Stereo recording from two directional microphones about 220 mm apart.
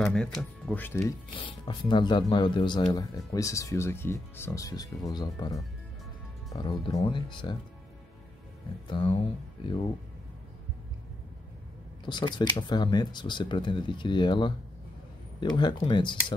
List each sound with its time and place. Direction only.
0.0 s speech: 5° left (ahead or behind)
1.3 s speech: 20° left (ahead or behind)
8.8 s speech: 20° left (ahead or behind)
12.0 s speech: 20° left (ahead or behind)